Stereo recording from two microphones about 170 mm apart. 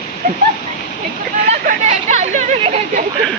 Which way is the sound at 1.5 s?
45° right (ahead or behind).